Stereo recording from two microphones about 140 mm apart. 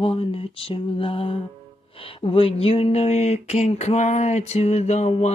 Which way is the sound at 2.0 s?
40° left (ahead or behind).